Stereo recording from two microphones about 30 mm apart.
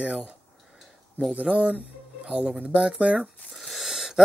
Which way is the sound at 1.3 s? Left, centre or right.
Right.